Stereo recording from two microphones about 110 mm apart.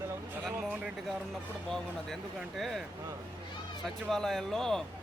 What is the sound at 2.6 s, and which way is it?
Speech, centre (ahead or behind).